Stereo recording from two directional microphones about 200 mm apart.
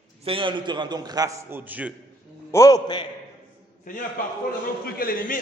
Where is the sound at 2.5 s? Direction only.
15° left (ahead or behind).